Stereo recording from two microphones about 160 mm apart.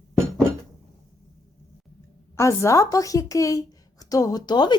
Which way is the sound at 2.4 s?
20° left (ahead or behind).